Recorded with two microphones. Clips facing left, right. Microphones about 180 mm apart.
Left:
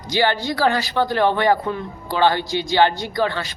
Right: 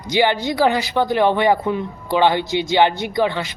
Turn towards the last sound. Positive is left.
turn(degrees=-20)  # may be behind; listen again after turning